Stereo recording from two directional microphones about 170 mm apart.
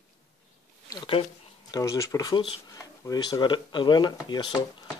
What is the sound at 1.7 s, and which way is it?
Speech, 20° left (ahead or behind).